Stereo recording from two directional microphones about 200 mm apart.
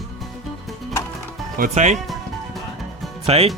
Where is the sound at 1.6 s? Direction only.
40° right (ahead or behind).